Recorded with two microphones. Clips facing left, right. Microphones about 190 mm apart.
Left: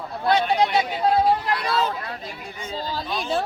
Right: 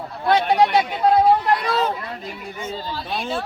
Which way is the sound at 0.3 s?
50° right (ahead or behind).